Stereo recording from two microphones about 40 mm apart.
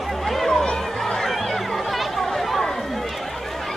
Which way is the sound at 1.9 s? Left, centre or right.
Centre.